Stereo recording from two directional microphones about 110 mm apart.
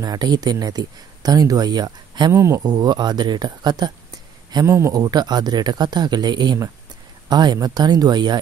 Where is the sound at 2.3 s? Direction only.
30° right (ahead or behind).